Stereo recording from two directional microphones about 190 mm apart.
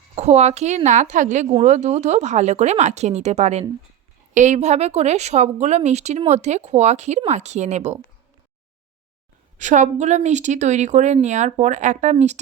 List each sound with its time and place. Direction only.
0.2 s a woman's voice: 35° right (ahead or behind)
9.6 s a woman's voice: 40° right (ahead or behind)